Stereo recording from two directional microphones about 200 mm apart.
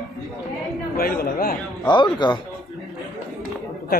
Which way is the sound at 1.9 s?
25° left (ahead or behind).